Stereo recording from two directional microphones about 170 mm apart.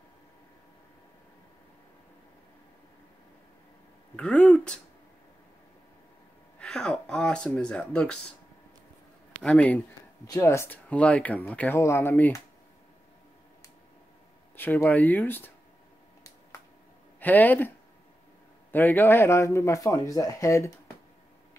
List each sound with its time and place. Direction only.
4.2 s speech: 5° left (ahead or behind)
6.6 s speech: 5° left (ahead or behind)
9.4 s speech: 5° left (ahead or behind)
14.6 s speech: 10° left (ahead or behind)
17.2 s speech: 10° left (ahead or behind)